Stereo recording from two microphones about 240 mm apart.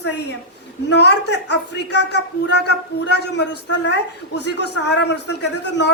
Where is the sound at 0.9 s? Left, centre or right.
Left.